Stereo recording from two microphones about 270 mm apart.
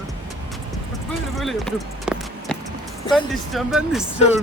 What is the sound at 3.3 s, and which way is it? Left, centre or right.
Speech, centre.